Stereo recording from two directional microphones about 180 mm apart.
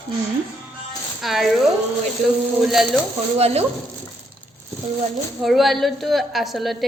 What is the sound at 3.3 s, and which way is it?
Speech, 35° right (ahead or behind).